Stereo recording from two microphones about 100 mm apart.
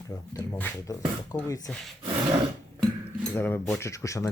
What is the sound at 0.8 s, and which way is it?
Speech, 35° left (ahead or behind).